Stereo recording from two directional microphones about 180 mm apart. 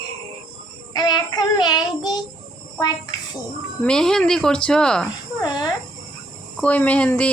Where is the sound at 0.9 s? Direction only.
25° left (ahead or behind).